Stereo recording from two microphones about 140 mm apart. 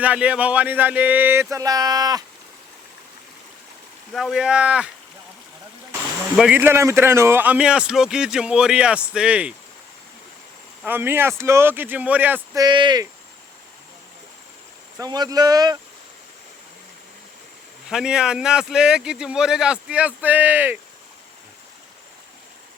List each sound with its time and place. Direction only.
0.0 s a man's voice: 10° right (ahead or behind); by 2.2 s 25° right (ahead or behind)
4.1 s a man's voice: centre (ahead or behind)
6.5 s a man's voice: 15° right (ahead or behind)
10.8 s a man's voice: 15° right (ahead or behind)
12.5 s speech: 30° right (ahead or behind)
14.9 s speech: 30° right (ahead or behind)
17.8 s a man's voice: 5° right (ahead or behind)